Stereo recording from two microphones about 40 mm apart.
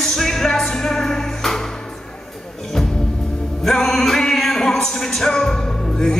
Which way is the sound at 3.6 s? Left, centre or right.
Centre.